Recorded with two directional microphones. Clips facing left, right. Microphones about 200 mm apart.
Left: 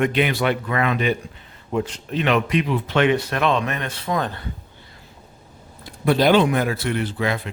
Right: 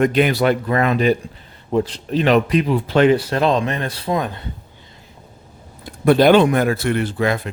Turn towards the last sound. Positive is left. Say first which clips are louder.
# right 4 dB
turn(degrees=-45)  # may be behind; listen again after turning